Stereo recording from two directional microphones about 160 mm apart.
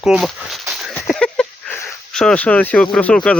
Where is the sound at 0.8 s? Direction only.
5° left (ahead or behind).